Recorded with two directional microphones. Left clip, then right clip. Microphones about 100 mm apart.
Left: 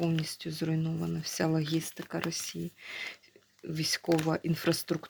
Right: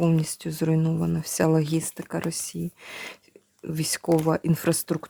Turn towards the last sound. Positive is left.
turn(degrees=-75)  # may be behind; listen again after turning